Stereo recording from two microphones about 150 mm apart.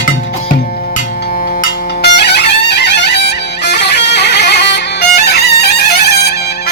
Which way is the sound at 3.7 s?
90° left.